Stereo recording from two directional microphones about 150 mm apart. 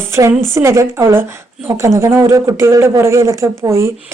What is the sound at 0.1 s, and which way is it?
Speech, 15° right (ahead or behind).